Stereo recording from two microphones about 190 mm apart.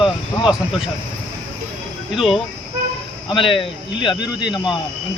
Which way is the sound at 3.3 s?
25° left (ahead or behind).